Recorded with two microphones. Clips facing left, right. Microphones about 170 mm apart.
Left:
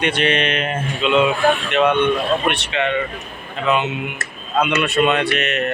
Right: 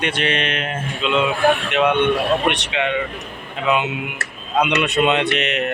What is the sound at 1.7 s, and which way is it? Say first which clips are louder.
Speech: left 1 dB; 10° right (ahead or behind).